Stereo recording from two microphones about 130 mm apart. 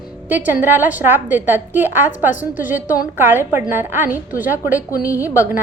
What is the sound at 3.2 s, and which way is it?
A woman's voice, 15° right (ahead or behind).